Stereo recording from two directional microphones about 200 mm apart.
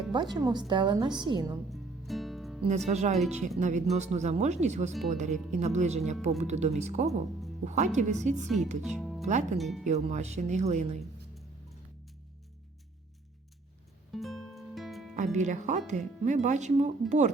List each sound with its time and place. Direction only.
0.1 s speech: 20° right (ahead or behind)
1.7 s music: centre (ahead or behind)
2.6 s speech: 35° right (ahead or behind)
8.8 s speech: centre (ahead or behind)
9.2 s speech: 35° right (ahead or behind)
9.6 s speech: centre (ahead or behind)
9.8 s speech: 35° right (ahead or behind)
14.1 s music: centre (ahead or behind)
15.1 s speech: 40° right (ahead or behind)